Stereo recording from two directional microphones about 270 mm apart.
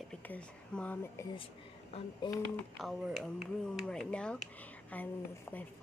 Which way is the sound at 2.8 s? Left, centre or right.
Centre.